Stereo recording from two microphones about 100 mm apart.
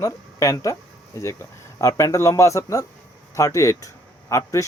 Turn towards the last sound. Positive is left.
turn(degrees=30)  # may be behind; listen again after turning